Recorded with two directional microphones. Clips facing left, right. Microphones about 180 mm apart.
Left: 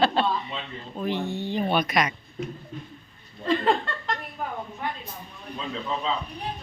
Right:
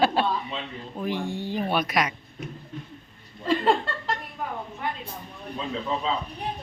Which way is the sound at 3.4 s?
5° right (ahead or behind).